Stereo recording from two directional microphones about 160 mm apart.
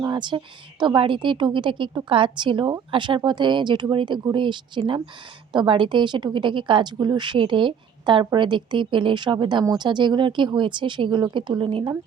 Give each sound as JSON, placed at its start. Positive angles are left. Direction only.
{"t": 0.0, "sound": "a woman's voice", "side_deg": -25}